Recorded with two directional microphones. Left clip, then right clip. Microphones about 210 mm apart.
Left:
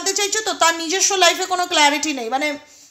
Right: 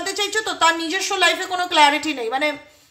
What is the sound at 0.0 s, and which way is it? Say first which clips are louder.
A woman's voice: left 2 dB; 30° left (ahead or behind).